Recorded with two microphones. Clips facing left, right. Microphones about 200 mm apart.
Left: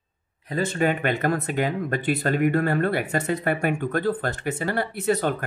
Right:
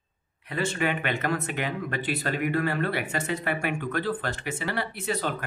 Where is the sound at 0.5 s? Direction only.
40° left (ahead or behind).